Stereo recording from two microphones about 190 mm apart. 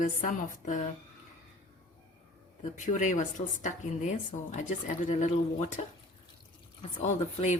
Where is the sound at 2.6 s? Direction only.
40° left (ahead or behind).